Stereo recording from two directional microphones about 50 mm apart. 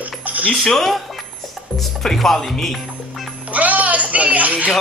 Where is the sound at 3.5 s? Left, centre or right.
Right.